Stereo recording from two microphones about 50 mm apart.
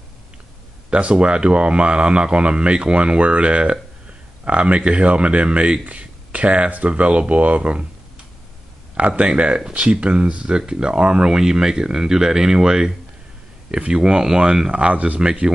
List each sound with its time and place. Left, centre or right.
0.8 s speech: right
8.9 s speech: right